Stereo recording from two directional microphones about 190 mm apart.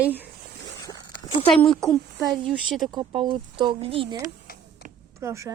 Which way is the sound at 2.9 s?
25° right (ahead or behind).